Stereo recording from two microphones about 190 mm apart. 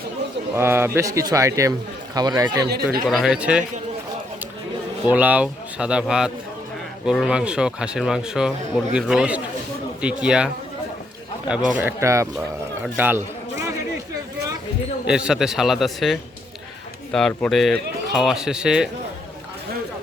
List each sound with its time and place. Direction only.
0.5 s speech: 10° right (ahead or behind)
2.6 s speech: 55° right (ahead or behind)
3.1 s a man's voice: centre (ahead or behind)
5.0 s a man's voice: 10° right (ahead or behind)
11.8 s a man's voice: 10° right (ahead or behind)
15.0 s a man's voice: 5° right (ahead or behind)